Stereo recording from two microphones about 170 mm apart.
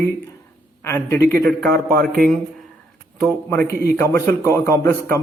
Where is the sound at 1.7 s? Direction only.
60° right (ahead or behind).